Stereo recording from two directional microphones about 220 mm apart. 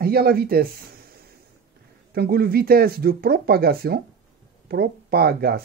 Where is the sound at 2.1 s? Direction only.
45° right (ahead or behind).